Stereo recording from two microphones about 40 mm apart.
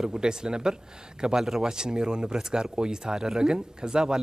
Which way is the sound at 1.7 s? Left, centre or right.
Centre.